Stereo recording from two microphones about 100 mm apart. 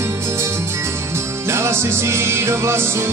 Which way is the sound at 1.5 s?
25° right (ahead or behind).